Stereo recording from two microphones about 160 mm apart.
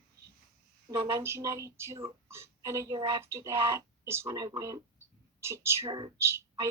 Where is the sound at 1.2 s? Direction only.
15° right (ahead or behind).